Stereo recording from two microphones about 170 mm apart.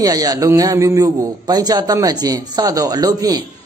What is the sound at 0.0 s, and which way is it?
A man's voice, 20° right (ahead or behind).